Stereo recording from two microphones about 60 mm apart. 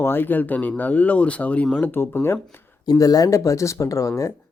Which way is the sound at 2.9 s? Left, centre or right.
Left.